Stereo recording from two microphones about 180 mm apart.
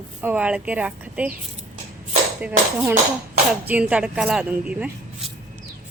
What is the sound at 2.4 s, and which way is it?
Speech, 10° right (ahead or behind).